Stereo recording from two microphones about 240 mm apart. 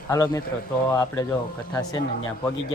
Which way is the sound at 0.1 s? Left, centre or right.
Centre.